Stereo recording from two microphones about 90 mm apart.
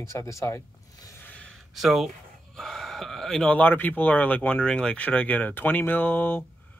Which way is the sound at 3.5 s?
20° left (ahead or behind).